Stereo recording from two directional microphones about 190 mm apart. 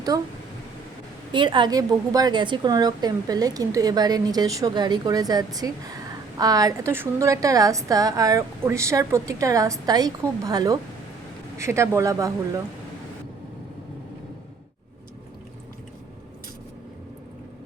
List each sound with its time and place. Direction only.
1.3 s a woman's voice: 25° right (ahead or behind)